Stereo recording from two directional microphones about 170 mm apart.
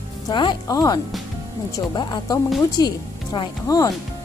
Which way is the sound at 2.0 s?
25° left (ahead or behind).